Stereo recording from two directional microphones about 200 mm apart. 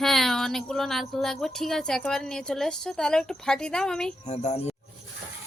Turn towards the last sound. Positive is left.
turn(degrees=35)  # may be behind; listen again after turning